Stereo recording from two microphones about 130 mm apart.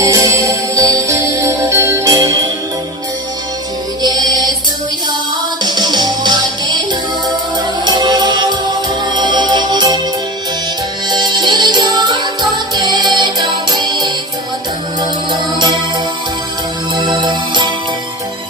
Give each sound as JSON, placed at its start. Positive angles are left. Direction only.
{"t": 0.0, "sound": "music", "side_deg": -25}
{"t": 4.0, "sound": "music", "side_deg": -30}
{"t": 5.6, "sound": "music", "side_deg": -30}
{"t": 7.9, "sound": "music", "side_deg": -30}
{"t": 11.1, "sound": "music", "side_deg": -35}
{"t": 15.3, "sound": "music", "side_deg": -35}
{"t": 16.9, "sound": "music", "side_deg": -35}